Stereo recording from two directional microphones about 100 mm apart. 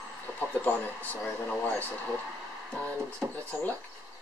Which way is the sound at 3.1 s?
10° left (ahead or behind).